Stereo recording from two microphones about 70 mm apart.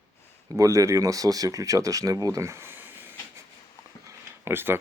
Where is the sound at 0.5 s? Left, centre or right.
Right.